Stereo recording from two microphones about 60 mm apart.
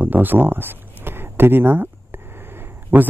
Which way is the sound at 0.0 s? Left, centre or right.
Right.